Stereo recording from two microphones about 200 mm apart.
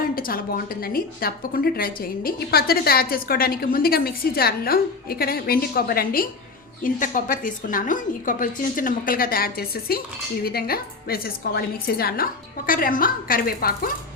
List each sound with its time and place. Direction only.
0.0 s a woman's voice: 45° left (ahead or behind)